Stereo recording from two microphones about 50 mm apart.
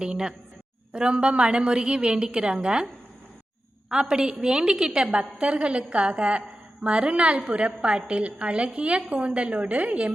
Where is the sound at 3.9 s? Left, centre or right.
Centre.